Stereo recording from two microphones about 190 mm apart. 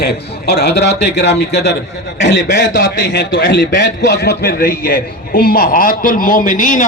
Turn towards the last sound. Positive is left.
turn(degrees=45)  # may be behind; listen again after turning